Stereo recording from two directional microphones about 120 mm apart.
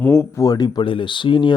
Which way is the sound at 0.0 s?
25° left (ahead or behind).